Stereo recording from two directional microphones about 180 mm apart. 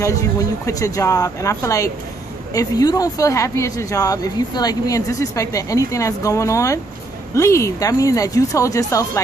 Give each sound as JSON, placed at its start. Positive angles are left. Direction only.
{"t": 0.0, "sound": "speech", "side_deg": 15}